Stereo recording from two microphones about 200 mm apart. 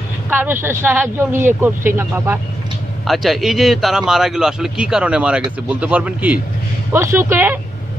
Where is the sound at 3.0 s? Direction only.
Centre (ahead or behind).